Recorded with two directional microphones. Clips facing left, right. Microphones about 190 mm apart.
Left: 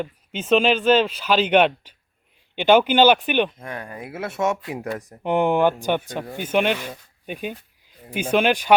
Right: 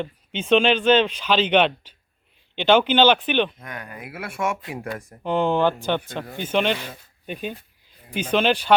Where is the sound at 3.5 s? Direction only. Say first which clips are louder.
Left 4 dB; 30° left (ahead or behind).